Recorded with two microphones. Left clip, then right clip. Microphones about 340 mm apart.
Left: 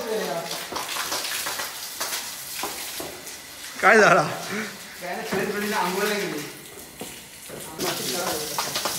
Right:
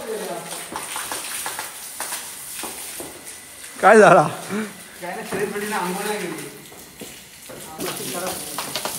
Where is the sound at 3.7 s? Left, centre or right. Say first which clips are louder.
Right 5 dB; centre.